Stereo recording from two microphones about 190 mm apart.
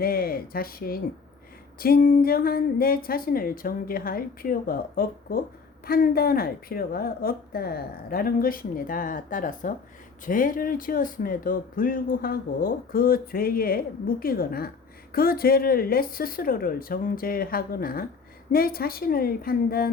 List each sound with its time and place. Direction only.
0.0 s speech: 50° left (ahead or behind)